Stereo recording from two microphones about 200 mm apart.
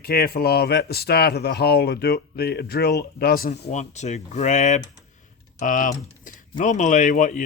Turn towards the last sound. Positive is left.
turn(degrees=40)  # may be behind; listen again after turning